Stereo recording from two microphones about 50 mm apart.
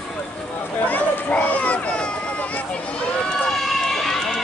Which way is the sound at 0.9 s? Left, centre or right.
Left.